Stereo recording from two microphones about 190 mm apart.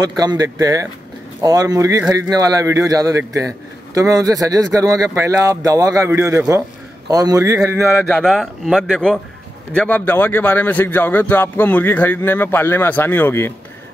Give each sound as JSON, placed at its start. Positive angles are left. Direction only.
{"t": 0.0, "sound": "a man's voice", "side_deg": -20}
{"t": 8.0, "sound": "a man's voice", "side_deg": 5}